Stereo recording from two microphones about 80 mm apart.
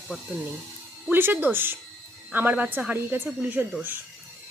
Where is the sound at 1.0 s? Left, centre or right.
Right.